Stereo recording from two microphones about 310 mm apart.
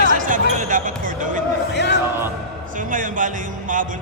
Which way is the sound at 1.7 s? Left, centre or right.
Left.